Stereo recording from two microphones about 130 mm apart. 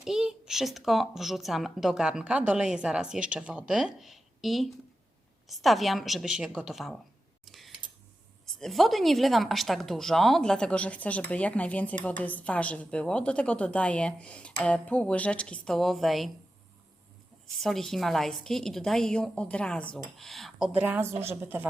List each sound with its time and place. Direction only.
0.0 s a woman's voice: 5° right (ahead or behind)
7.4 s a sound: centre (ahead or behind)
8.5 s a woman's voice: centre (ahead or behind)
17.6 s speech: centre (ahead or behind)
20.7 s a woman's voice: 15° right (ahead or behind)